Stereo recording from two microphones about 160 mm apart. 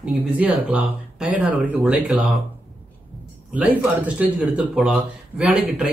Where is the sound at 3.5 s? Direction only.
10° right (ahead or behind).